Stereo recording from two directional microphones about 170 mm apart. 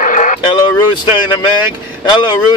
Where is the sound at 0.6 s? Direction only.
25° left (ahead or behind).